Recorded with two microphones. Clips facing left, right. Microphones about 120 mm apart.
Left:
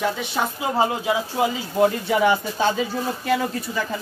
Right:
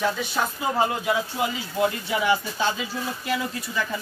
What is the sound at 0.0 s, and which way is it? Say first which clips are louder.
Speech: left 1 dB; 20° left (ahead or behind).